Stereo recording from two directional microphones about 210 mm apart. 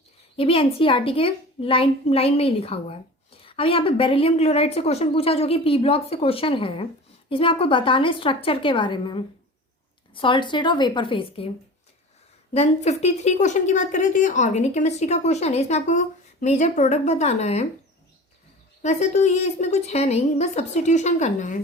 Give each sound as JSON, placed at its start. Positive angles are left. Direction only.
{"t": 0.3, "sound": "a woman's voice", "side_deg": 25}
{"t": 12.5, "sound": "a woman's voice", "side_deg": 30}
{"t": 18.8, "sound": "a woman's voice", "side_deg": 35}